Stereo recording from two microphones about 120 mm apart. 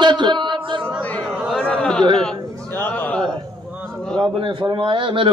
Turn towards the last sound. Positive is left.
turn(degrees=-45)  # may be behind; listen again after turning